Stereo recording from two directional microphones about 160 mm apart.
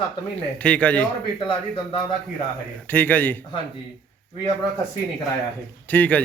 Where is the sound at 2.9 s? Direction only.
10° left (ahead or behind).